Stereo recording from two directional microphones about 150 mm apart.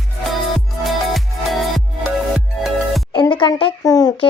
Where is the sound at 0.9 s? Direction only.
Centre (ahead or behind).